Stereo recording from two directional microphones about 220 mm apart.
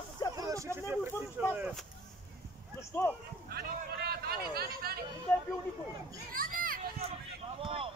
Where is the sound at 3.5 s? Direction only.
45° right (ahead or behind).